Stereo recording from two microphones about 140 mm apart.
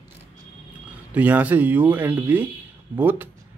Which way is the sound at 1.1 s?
10° right (ahead or behind).